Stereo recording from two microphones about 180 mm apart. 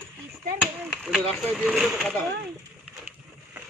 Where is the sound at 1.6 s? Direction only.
Centre (ahead or behind).